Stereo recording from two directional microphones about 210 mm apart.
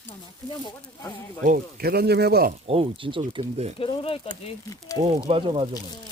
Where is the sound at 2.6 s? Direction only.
25° right (ahead or behind).